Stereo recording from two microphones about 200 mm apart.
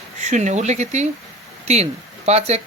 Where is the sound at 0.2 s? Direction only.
35° right (ahead or behind).